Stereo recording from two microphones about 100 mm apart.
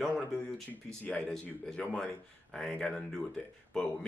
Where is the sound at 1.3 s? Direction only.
5° left (ahead or behind).